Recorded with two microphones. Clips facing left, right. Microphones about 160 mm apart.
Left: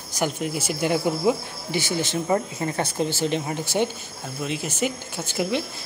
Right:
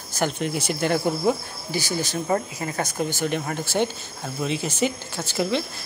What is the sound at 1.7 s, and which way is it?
Speech, 20° left (ahead or behind).